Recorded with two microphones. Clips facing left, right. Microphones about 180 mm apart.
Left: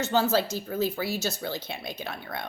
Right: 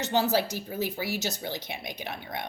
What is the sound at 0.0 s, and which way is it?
A woman's voice, 15° right (ahead or behind).